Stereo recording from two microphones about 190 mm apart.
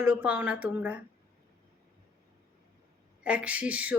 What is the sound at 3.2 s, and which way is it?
Speech, 5° right (ahead or behind).